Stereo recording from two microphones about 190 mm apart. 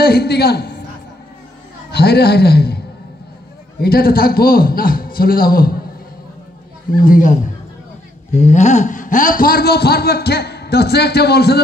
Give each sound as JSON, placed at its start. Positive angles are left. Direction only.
{"t": 0.0, "sound": "a man's voice", "side_deg": 55}
{"t": 1.9, "sound": "a man's voice", "side_deg": 60}
{"t": 3.8, "sound": "a man's voice", "side_deg": 55}
{"t": 7.1, "sound": "a man's voice", "side_deg": 45}